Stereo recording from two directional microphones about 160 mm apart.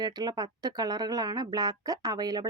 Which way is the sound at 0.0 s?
25° right (ahead or behind).